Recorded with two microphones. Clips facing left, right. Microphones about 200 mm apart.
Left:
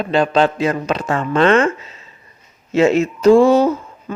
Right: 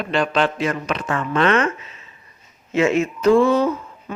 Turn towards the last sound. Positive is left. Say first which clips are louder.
# left 4 dB
turn(degrees=40)  # may be behind; listen again after turning